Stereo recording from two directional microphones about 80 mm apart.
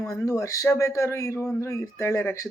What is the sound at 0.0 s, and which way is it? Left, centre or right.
Speech, left.